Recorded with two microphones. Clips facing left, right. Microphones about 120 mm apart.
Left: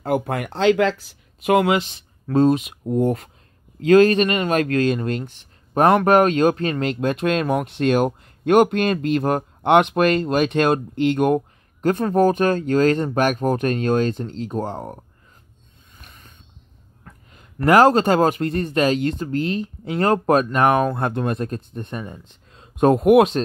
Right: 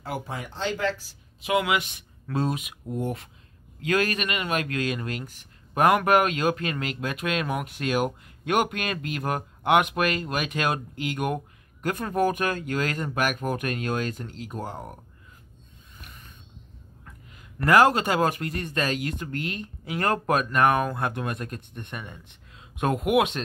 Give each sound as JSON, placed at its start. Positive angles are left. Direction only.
{"t": 0.0, "sound": "speech", "side_deg": 55}
{"t": 1.4, "sound": "speech", "side_deg": 45}
{"t": 3.0, "sound": "speech", "side_deg": 45}
{"t": 17.0, "sound": "a sound", "side_deg": 35}
{"t": 17.7, "sound": "speech", "side_deg": 35}